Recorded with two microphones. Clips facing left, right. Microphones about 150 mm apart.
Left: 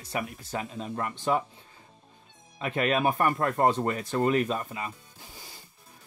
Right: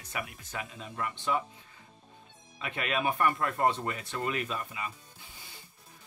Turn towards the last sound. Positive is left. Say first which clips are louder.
# left 4 dB
turn(degrees=40)  # may be behind; listen again after turning